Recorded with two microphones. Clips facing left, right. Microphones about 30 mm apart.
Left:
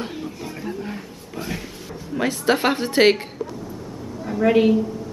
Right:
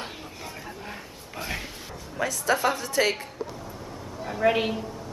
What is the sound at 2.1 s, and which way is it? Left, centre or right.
A woman's voice, left.